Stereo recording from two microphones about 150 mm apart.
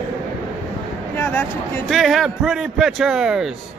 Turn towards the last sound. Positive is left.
turn(degrees=-5)  # may be behind; listen again after turning